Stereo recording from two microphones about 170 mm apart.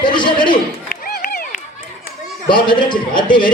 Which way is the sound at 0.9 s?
55° left (ahead or behind).